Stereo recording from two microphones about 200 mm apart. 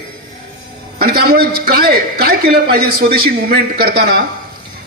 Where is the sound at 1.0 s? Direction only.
50° right (ahead or behind).